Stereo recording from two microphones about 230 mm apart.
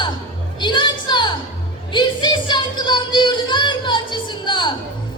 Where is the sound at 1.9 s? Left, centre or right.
Centre.